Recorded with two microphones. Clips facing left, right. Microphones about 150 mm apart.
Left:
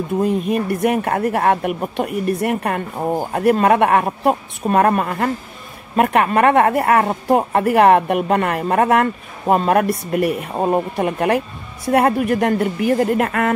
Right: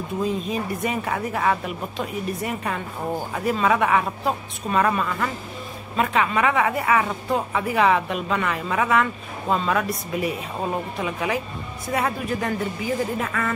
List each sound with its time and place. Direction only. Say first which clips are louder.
0.2 s a woman's voice: left 6 dB; 60° left (ahead or behind)